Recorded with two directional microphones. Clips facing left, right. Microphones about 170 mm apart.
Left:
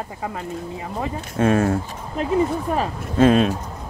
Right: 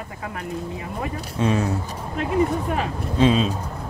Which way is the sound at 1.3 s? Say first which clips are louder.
Left 4 dB; 50° left (ahead or behind).